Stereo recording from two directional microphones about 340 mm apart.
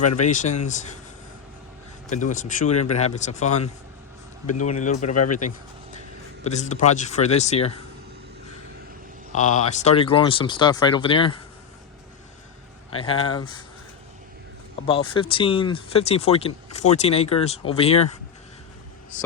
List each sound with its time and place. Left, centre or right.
0.2 s speech: left
2.0 s speech: left
5.1 s speech: left
6.4 s speech: centre
9.3 s speech: left
13.0 s speech: centre
14.8 s speech: centre